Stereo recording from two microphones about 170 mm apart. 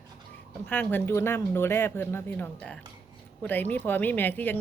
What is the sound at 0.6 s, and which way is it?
Speech, 10° left (ahead or behind).